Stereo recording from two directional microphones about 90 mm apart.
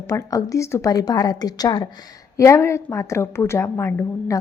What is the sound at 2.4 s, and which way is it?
A woman's voice, 30° left (ahead or behind).